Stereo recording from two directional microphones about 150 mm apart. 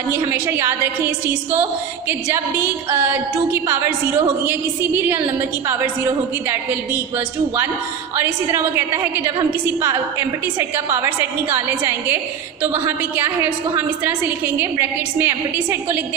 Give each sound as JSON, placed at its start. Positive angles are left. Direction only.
{"t": 0.1, "sound": "a woman's voice", "side_deg": -15}
{"t": 4.9, "sound": "a woman's voice", "side_deg": -15}
{"t": 8.1, "sound": "a woman's voice", "side_deg": -15}